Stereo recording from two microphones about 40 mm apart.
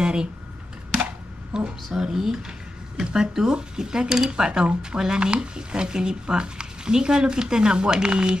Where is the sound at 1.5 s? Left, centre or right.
Centre.